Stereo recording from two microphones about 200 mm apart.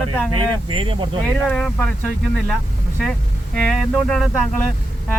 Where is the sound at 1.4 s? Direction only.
5° left (ahead or behind).